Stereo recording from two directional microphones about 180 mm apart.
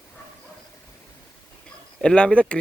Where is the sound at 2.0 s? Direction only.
5° left (ahead or behind).